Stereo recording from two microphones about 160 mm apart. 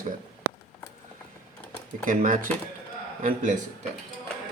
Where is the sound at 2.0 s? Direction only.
55° right (ahead or behind).